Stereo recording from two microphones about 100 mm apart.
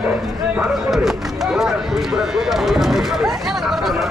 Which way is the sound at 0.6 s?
Centre (ahead or behind).